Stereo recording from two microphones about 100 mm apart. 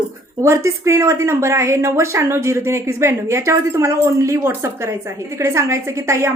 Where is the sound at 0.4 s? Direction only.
30° right (ahead or behind).